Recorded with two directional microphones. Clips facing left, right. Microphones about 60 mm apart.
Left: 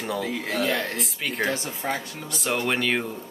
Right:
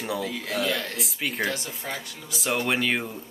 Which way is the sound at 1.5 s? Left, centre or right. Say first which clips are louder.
Left 4 dB; left.